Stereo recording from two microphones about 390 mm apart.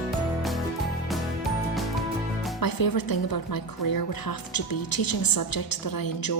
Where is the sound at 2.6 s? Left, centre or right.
Left.